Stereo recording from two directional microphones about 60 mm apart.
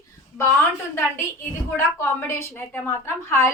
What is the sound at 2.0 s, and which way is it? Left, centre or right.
A woman's voice, left.